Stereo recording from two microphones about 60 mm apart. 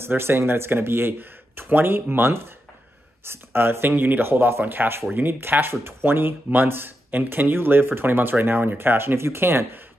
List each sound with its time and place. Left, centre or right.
0.0 s speech: right